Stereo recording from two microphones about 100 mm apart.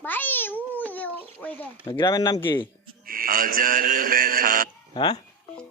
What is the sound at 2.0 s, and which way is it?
Speech, 40° left (ahead or behind).